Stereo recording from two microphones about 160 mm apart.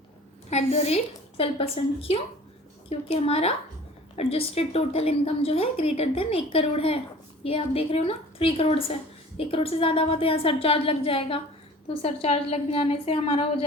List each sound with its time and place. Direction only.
0.5 s a woman's voice: 40° left (ahead or behind)